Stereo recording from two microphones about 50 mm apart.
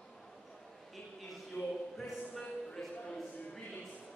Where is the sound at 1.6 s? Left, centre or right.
Left.